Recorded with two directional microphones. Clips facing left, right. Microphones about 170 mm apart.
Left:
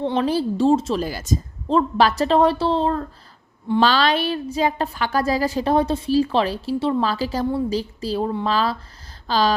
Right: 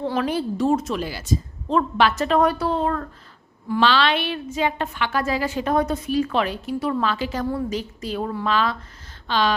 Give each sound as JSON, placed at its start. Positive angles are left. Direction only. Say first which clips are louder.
{"t": 0.0, "sound": "a woman's voice", "louder": "left 3 dB", "side_deg": 30}
{"t": 1.0, "sound": "a woman's voice", "louder": "left 1 dB", "side_deg": 45}
{"t": 3.8, "sound": "a woman's voice", "louder": "left 2 dB", "side_deg": 40}